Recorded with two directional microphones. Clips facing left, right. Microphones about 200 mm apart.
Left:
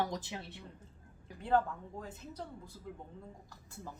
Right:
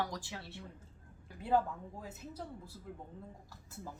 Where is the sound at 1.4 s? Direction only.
10° right (ahead or behind).